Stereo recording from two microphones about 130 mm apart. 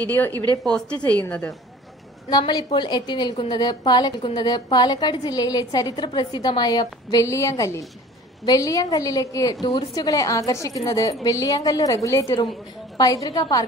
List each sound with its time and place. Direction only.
0.7 s a woman's voice: 5° left (ahead or behind)
2.2 s a woman's voice: 30° left (ahead or behind)